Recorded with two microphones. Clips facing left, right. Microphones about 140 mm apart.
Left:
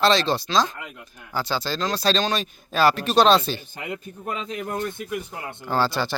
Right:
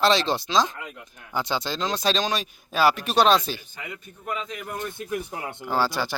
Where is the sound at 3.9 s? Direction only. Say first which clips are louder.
Left 3 dB; 40° left (ahead or behind).